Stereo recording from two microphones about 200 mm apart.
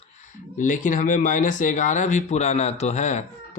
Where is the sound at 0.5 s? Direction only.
40° left (ahead or behind).